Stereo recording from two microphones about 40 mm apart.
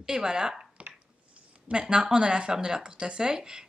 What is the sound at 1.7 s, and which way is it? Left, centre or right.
Speech, right.